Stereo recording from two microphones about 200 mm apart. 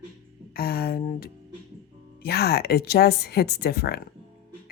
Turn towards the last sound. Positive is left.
turn(degrees=50)  # may be behind; listen again after turning